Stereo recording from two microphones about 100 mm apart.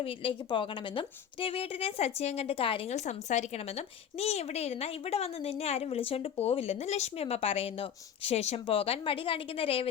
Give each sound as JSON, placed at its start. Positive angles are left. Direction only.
{"t": 0.0, "sound": "a woman's voice", "side_deg": 60}
{"t": 3.8, "sound": "a woman's voice", "side_deg": 90}